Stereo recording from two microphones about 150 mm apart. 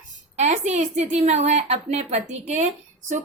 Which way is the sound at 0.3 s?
50° right (ahead or behind).